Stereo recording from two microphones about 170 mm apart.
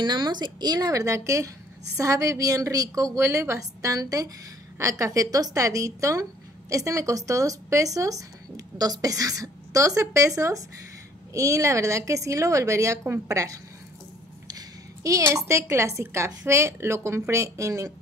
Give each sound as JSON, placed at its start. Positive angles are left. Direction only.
{"t": 0.0, "sound": "a woman's voice", "side_deg": -25}
{"t": 15.0, "sound": "a woman's voice", "side_deg": -20}